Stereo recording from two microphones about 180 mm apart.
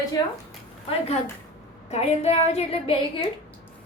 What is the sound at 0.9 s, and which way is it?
A woman's voice, 35° left (ahead or behind).